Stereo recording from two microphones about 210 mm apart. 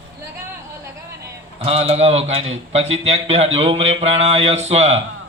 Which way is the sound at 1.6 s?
30° right (ahead or behind).